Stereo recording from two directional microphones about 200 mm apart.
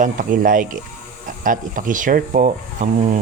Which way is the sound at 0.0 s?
40° right (ahead or behind).